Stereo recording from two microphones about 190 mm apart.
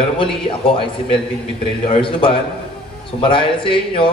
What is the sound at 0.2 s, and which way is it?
Speech, 25° left (ahead or behind).